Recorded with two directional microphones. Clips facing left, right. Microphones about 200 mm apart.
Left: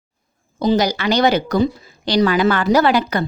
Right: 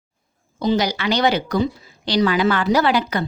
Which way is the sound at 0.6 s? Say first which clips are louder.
Left 3 dB; 40° left (ahead or behind).